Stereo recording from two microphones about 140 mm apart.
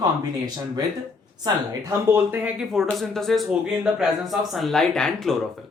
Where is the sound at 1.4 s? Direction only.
20° right (ahead or behind).